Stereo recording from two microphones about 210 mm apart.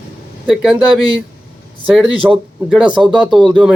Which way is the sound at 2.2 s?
5° right (ahead or behind).